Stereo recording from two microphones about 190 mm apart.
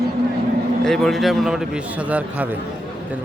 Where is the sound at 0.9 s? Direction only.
Centre (ahead or behind).